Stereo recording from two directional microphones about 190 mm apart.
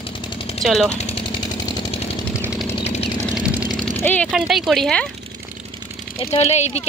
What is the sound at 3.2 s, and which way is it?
Engine, 5° right (ahead or behind).